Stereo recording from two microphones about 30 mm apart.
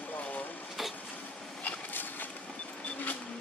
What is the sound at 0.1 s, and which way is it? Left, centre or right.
Vehicle, left.